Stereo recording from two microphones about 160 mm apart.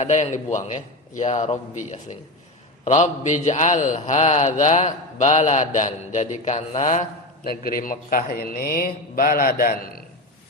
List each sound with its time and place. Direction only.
0.0 s a man's voice: 45° left (ahead or behind); by 10.0 s 65° left (ahead or behind)